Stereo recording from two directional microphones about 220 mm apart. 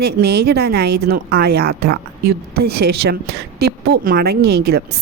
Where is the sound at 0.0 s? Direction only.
45° right (ahead or behind).